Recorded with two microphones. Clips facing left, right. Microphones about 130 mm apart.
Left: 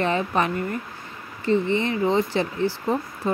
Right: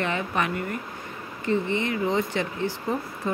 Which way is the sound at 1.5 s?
30° left (ahead or behind).